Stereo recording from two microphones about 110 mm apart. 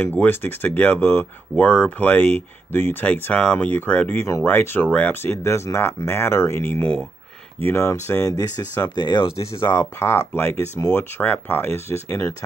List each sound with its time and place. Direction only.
0.2 s speech: 20° left (ahead or behind)
7.6 s speech: 25° left (ahead or behind); by 9.8 s 45° left (ahead or behind)
9.9 s speech: 25° left (ahead or behind)